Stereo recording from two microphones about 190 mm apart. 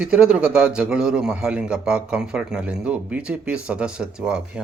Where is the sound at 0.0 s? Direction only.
5° right (ahead or behind).